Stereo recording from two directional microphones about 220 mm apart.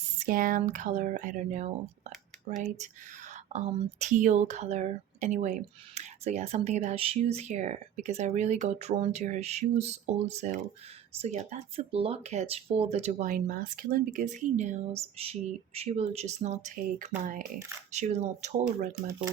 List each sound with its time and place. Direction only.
0.3 s speech: 40° right (ahead or behind)